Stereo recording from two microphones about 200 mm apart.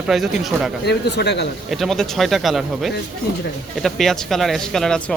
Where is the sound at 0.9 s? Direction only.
55° left (ahead or behind).